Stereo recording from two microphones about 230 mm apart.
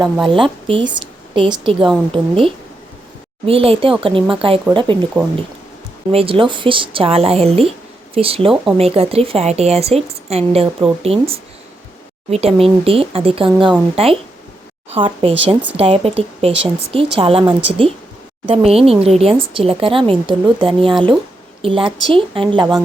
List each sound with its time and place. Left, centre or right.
0.0 s speech: right
6.1 s speech: right